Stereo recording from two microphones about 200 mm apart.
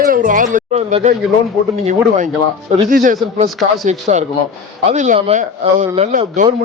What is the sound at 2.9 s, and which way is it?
A man's voice, 40° right (ahead or behind).